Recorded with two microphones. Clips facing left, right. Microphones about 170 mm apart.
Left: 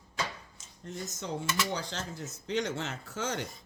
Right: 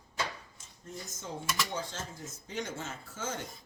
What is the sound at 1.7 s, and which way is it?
Speech, 75° left (ahead or behind).